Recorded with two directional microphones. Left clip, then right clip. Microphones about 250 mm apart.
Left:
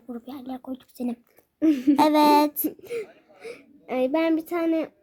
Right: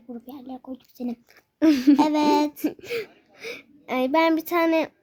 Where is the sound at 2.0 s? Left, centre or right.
Centre.